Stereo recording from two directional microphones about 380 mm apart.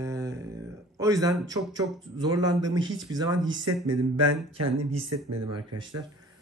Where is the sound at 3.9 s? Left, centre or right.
Right.